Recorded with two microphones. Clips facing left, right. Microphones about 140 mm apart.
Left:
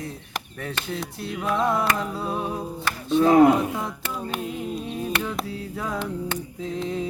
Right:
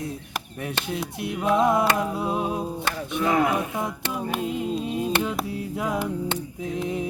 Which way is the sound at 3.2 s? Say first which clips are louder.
Left 7 dB; 30° left (ahead or behind).